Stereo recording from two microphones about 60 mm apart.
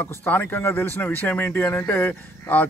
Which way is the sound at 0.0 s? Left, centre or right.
Left.